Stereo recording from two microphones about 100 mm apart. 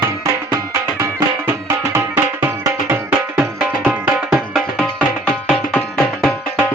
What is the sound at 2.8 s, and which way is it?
Music, 25° right (ahead or behind).